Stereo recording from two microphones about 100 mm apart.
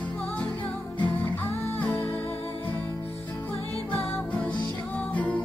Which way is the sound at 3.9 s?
15° left (ahead or behind).